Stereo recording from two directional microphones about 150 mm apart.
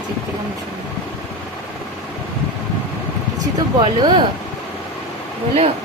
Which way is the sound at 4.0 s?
30° right (ahead or behind).